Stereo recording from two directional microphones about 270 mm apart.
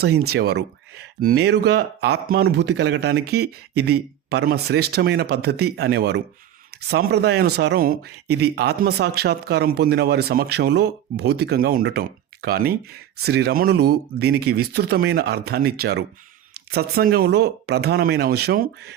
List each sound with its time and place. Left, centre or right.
0.0 s speech: right